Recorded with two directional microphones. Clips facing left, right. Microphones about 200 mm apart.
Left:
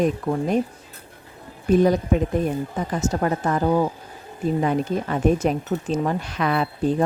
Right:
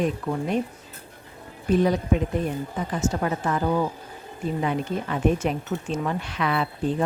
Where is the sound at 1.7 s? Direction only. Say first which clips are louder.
Left 3 dB; 45° left (ahead or behind).